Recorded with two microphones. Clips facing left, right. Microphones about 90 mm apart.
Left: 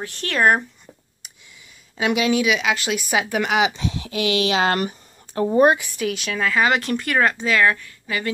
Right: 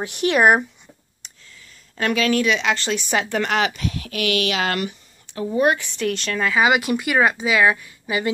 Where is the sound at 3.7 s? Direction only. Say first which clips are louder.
Left 1 dB; 25° left (ahead or behind); by 5.7 s 40° left (ahead or behind).